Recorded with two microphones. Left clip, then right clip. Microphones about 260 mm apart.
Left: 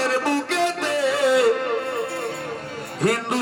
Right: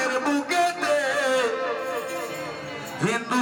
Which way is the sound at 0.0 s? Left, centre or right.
Centre.